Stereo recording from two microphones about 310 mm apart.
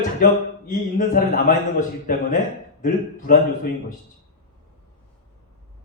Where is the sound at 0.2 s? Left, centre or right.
Left.